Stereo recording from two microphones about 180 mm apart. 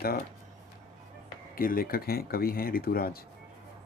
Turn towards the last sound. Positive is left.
turn(degrees=55)  # may be behind; listen again after turning